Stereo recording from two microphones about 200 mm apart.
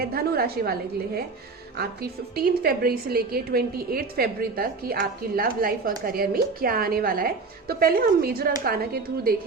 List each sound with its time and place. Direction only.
0.0 s a woman's voice: 50° right (ahead or behind)